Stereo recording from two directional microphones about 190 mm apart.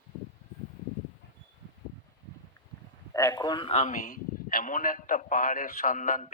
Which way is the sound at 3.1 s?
15° left (ahead or behind).